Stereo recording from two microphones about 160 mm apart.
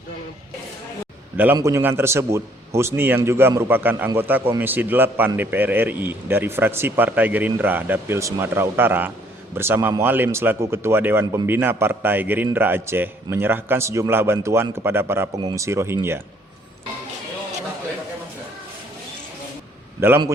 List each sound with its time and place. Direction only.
1.5 s speech: 15° right (ahead or behind)
20.0 s speech: 15° right (ahead or behind)